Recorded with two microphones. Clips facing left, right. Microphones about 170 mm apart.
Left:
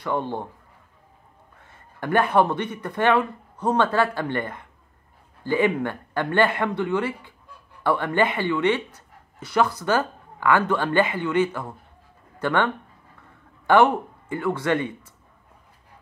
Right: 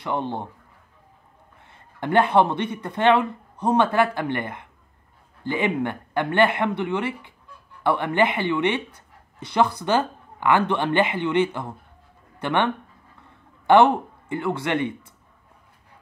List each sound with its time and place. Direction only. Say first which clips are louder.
0.0 s speech: even; 20° right (ahead or behind)
1.6 s a man's voice: right 2 dB; 20° right (ahead or behind)
14.3 s speech: left 1 dB; 20° right (ahead or behind)